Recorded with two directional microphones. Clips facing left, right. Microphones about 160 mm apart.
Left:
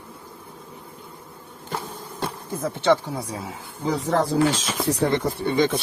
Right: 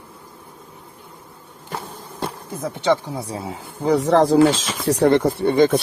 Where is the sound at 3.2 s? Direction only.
30° right (ahead or behind).